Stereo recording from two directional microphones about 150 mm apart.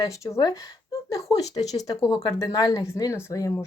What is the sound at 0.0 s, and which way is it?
Speech, 25° left (ahead or behind).